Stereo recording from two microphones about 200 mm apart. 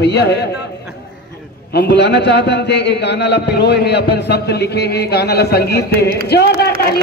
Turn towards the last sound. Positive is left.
turn(degrees=55)  # may be behind; listen again after turning